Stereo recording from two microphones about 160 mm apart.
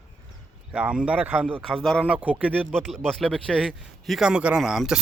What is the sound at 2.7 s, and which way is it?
Speech, centre (ahead or behind).